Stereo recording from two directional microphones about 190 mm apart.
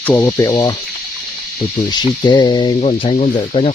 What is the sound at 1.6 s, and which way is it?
Speech, 30° left (ahead or behind).